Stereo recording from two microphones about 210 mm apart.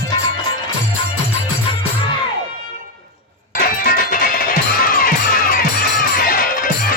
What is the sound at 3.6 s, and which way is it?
Music, 40° left (ahead or behind).